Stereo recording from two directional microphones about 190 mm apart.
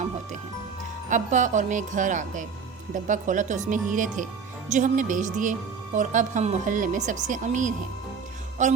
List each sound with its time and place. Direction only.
1.1 s a woman's voice: 40° right (ahead or behind)